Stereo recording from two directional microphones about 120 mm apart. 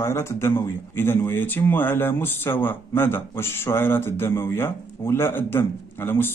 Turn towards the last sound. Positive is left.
turn(degrees=20)  # may be behind; listen again after turning